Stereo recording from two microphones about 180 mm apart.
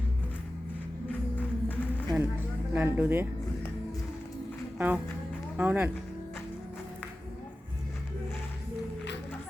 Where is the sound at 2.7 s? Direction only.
10° right (ahead or behind).